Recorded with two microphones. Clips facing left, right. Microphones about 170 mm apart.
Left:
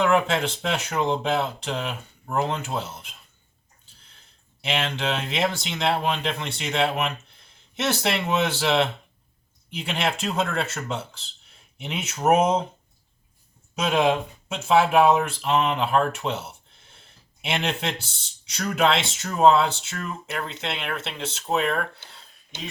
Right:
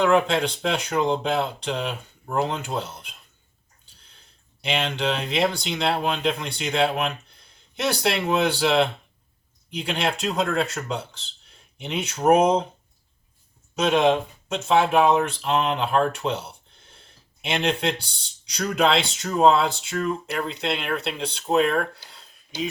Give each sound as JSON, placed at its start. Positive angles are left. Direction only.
{"t": 0.0, "sound": "speech", "side_deg": 5}
{"t": 4.6, "sound": "speech", "side_deg": 5}
{"t": 13.7, "sound": "speech", "side_deg": 5}
{"t": 22.1, "sound": "a sound", "side_deg": 0}